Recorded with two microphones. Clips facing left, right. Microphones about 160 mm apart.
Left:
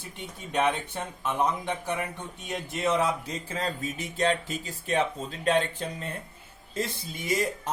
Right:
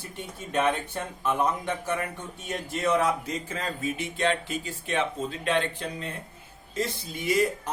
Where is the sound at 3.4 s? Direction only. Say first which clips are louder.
Even; 35° left (ahead or behind).